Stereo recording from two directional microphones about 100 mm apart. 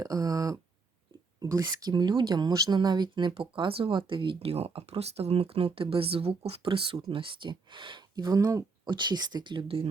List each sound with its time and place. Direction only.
0.0 s speech: 35° right (ahead or behind)
3.5 s speech: 60° right (ahead or behind)
7.1 s speech: 60° right (ahead or behind); by 8.9 s 35° right (ahead or behind)
8.9 s speech: 50° right (ahead or behind)